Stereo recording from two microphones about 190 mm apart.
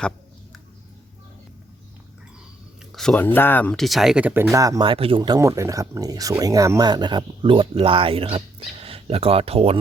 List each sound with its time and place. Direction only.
2.9 s speech: 5° left (ahead or behind)
4.5 s speech: 15° right (ahead or behind)